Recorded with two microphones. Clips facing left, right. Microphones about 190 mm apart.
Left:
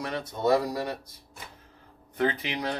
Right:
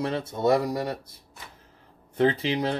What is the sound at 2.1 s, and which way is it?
Speech, 30° right (ahead or behind).